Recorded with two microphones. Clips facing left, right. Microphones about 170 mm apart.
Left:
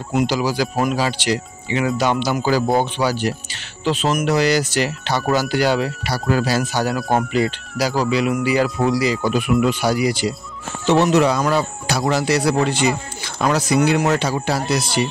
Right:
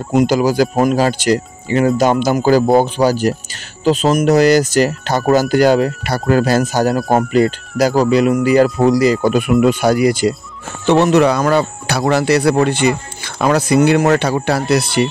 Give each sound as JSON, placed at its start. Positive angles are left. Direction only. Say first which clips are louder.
{"t": 0.1, "sound": "speech", "louder": "right 6 dB", "side_deg": -45}